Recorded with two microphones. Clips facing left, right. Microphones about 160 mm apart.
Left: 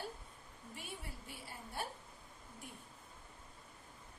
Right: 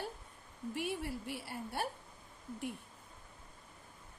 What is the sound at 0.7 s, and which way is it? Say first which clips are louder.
A woman's voice: right 12 dB; 70° right (ahead or behind).